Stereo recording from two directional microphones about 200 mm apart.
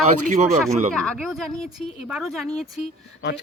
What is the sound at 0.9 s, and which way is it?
Speech, centre (ahead or behind).